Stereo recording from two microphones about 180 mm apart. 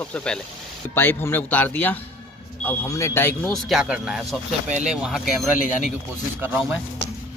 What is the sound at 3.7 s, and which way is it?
Speech, 5° right (ahead or behind).